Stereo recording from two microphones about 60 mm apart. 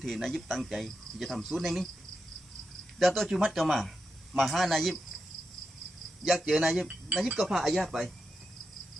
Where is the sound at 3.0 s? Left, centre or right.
Centre.